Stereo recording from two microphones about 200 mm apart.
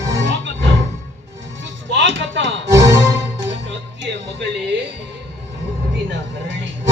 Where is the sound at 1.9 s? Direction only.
65° right (ahead or behind).